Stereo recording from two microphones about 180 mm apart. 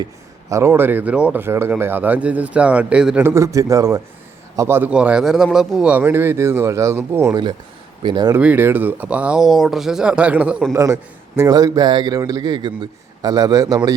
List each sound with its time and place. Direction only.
0.5 s a man's voice: 15° right (ahead or behind)
8.4 s a man's voice: 10° right (ahead or behind)